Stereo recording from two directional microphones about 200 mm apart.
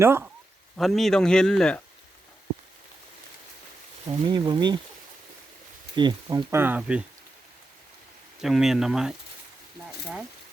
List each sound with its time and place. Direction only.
0.0 s speech: 10° right (ahead or behind)
0.8 s a man's voice: centre (ahead or behind)
4.3 s speech: 20° right (ahead or behind)
6.0 s speech: 20° right (ahead or behind)
8.4 s a man's voice: centre (ahead or behind)